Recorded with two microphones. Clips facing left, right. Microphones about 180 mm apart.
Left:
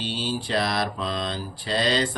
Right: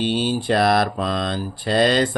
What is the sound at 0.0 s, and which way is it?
Mantra, 55° right (ahead or behind).